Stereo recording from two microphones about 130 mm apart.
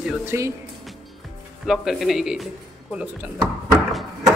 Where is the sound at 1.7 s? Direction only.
Centre (ahead or behind).